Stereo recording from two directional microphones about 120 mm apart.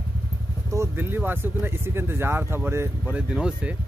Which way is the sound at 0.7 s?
15° right (ahead or behind).